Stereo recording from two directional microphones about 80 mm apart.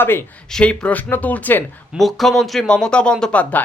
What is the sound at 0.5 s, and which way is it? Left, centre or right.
Speech, centre.